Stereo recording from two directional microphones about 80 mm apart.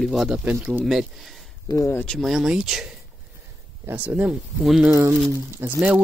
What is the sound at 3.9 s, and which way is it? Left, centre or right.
Speech, centre.